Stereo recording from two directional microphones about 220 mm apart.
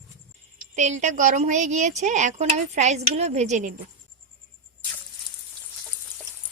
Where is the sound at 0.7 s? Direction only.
30° right (ahead or behind).